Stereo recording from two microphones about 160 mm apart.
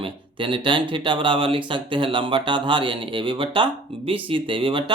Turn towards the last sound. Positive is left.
turn(degrees=-30)  # may be behind; listen again after turning